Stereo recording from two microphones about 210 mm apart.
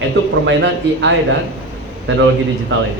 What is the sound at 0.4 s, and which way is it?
Speech, 60° right (ahead or behind).